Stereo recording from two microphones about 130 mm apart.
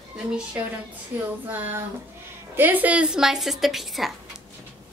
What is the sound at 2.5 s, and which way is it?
A child's voice, 15° right (ahead or behind).